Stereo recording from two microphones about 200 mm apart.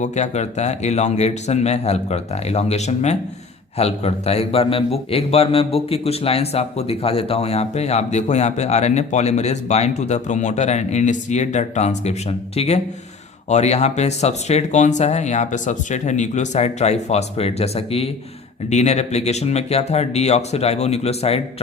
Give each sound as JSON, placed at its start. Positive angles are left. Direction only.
{"t": 0.0, "sound": "a man's voice", "side_deg": 35}